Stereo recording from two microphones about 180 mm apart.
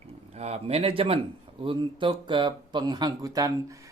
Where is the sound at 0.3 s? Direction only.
35° right (ahead or behind).